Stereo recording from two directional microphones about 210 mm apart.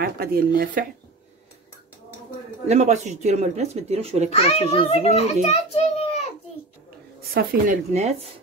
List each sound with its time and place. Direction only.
0.0 s speech: 45° right (ahead or behind)
2.7 s speech: 35° right (ahead or behind)
4.3 s a child's voice: 30° left (ahead or behind)
7.3 s speech: 40° right (ahead or behind)